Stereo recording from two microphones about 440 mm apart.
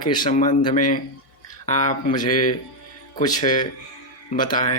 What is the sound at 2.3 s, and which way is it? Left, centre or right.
Speech, left.